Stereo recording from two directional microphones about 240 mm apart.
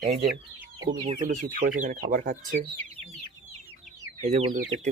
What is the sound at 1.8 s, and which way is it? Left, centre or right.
Speech, right.